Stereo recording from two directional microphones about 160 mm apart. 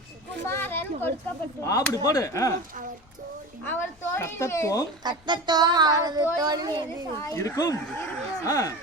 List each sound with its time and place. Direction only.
0.4 s a woman's voice: 15° left (ahead or behind)
3.6 s a woman's voice: 15° left (ahead or behind)
5.0 s child singing: 25° right (ahead or behind)
7.2 s speech: 15° left (ahead or behind)